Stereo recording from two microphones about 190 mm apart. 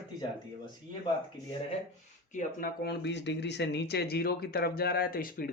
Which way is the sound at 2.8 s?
65° left (ahead or behind).